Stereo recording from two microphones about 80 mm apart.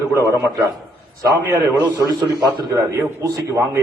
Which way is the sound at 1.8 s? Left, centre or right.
Right.